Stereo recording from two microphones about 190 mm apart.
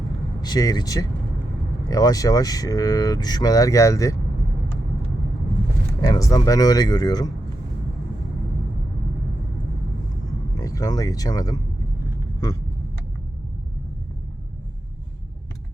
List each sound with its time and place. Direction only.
0.4 s speech: 20° left (ahead or behind)
6.0 s speech: 15° left (ahead or behind)
10.6 s speech: 20° left (ahead or behind)